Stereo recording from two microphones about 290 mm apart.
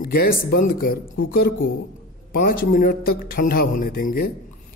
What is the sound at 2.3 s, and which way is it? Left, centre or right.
A man's voice, left.